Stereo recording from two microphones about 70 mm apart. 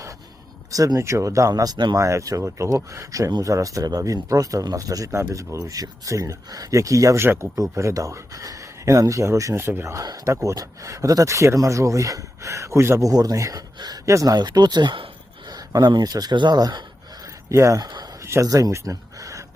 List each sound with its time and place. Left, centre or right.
0.7 s speech: right
2.0 s speech: right
9.6 s speech: right
9.9 s speech: right
13.0 s speech: right
13.7 s speech: right
14.0 s speech: right
14.3 s speech: right
15.4 s speech: right
17.5 s speech: right
17.7 s speech: right
18.2 s a sound: right
18.4 s speech: right
18.7 s a sound: right